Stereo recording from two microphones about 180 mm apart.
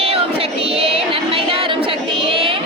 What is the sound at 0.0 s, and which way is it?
Female singing, 35° right (ahead or behind).